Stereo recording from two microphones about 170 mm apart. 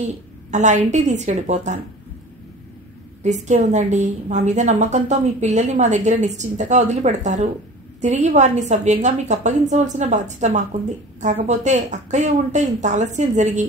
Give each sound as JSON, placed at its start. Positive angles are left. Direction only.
{"t": 0.5, "sound": "a woman's voice", "side_deg": -45}
{"t": 3.4, "sound": "a woman's voice", "side_deg": -45}